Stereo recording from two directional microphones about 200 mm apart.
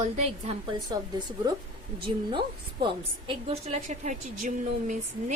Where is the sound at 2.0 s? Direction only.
25° right (ahead or behind).